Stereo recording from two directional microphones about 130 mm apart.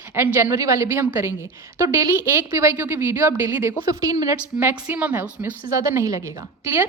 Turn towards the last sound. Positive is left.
turn(degrees=-20)  # may be behind; listen again after turning